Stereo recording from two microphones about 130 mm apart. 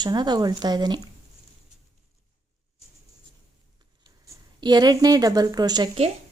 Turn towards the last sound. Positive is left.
turn(degrees=-35)  # may be behind; listen again after turning